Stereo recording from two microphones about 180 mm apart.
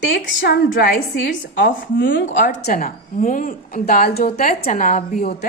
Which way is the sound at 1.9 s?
90° left.